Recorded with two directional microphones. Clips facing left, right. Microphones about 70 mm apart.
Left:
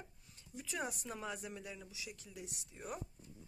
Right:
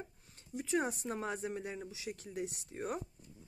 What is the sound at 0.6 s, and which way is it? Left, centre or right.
Speech, right.